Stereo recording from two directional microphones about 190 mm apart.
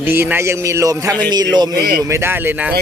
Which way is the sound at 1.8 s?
60° right (ahead or behind).